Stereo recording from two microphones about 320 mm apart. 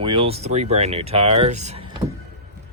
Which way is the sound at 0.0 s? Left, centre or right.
Centre.